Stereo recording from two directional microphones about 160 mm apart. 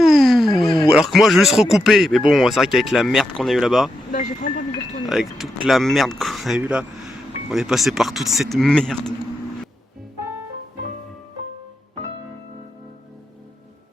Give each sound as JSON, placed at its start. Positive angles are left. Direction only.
{"t": 0.0, "sound": "dog", "side_deg": 0}
{"t": 0.7, "sound": "a sound", "side_deg": 30}
{"t": 0.9, "sound": "speech", "side_deg": 0}
{"t": 4.1, "sound": "music", "side_deg": 50}
{"t": 5.0, "sound": "speech", "side_deg": 0}